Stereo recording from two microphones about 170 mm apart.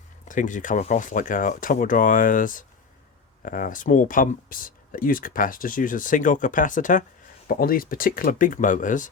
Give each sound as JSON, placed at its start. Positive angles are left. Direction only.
{"t": 0.3, "sound": "speech", "side_deg": 50}